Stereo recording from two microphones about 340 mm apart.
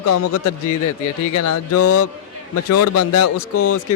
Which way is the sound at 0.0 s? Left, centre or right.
Left.